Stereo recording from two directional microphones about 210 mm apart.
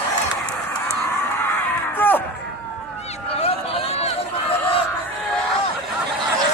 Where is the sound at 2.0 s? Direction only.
10° left (ahead or behind).